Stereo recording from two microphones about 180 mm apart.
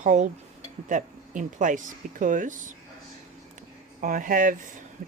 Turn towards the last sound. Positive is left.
turn(degrees=-50)  # may be behind; listen again after turning